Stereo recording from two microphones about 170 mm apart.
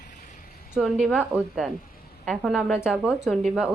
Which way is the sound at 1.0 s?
Centre (ahead or behind).